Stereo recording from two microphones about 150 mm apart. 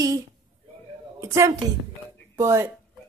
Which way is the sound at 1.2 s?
20° right (ahead or behind).